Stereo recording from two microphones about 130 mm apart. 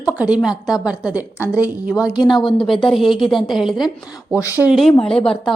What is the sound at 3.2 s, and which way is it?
Speech, centre (ahead or behind).